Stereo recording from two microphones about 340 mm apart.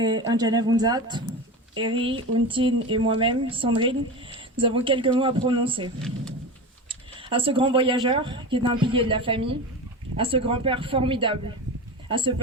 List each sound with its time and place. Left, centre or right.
0.0 s speech: centre
6.0 s speech: centre
7.3 s speech: centre